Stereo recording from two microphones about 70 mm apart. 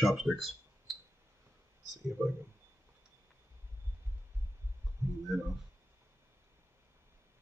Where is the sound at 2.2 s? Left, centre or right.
Right.